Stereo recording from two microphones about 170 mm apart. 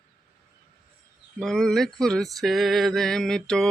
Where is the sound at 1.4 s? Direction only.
5° left (ahead or behind).